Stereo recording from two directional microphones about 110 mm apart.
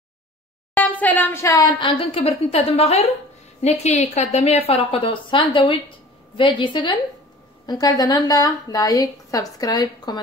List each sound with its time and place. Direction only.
0.7 s a woman's voice: 15° left (ahead or behind)
1.8 s a woman's voice: 55° left (ahead or behind); by 3.1 s 70° left (ahead or behind)
3.6 s a woman's voice: 90° left; by 7.0 s 45° left (ahead or behind)
7.6 s a woman's voice: 35° left (ahead or behind)